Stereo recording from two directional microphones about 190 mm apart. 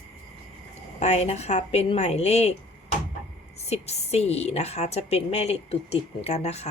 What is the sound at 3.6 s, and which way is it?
A woman's voice, 35° left (ahead or behind).